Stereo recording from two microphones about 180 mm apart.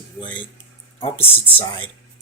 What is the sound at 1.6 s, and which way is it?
Speech, 25° left (ahead or behind).